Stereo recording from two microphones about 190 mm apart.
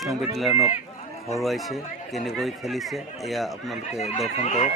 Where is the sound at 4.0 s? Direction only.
35° left (ahead or behind).